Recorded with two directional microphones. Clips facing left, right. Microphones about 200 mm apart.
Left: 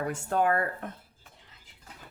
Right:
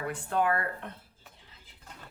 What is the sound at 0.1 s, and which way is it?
Speech, 45° left (ahead or behind).